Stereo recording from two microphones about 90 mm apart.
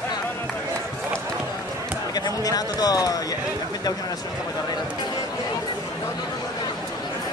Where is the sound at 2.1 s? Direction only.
45° left (ahead or behind).